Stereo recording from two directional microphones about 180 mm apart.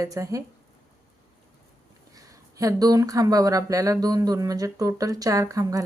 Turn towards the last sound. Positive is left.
turn(degrees=-20)  # may be behind; listen again after turning